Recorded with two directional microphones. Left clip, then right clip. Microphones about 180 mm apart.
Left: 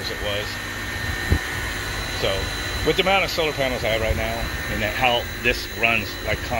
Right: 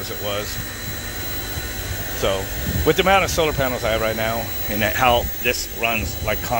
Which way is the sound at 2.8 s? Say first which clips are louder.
Right 3 dB; 25° right (ahead or behind).